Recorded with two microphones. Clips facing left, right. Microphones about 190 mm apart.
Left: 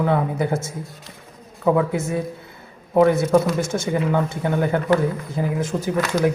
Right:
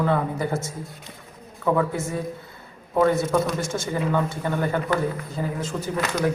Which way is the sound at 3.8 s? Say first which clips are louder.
Left 3 dB; 15° left (ahead or behind).